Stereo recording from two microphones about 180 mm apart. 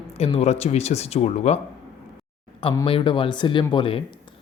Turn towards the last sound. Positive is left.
turn(degrees=30)  # may be behind; listen again after turning